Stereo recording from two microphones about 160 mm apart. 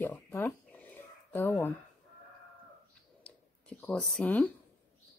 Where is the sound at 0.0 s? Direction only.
10° left (ahead or behind).